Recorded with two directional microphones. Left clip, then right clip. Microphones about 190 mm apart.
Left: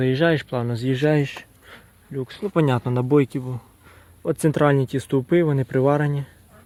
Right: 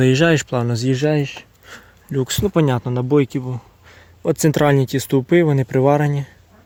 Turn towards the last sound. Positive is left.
turn(degrees=-15)  # may be behind; listen again after turning